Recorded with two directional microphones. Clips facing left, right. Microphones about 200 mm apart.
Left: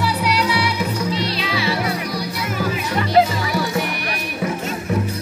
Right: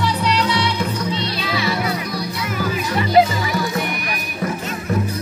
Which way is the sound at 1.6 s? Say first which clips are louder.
Even; 35° left (ahead or behind).